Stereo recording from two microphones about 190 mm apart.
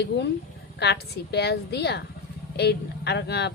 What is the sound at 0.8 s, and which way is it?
A woman's voice, 60° left (ahead or behind).